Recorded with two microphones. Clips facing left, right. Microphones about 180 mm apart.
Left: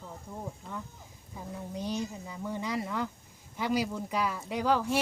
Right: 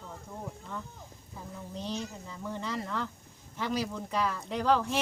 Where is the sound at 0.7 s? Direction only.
10° left (ahead or behind).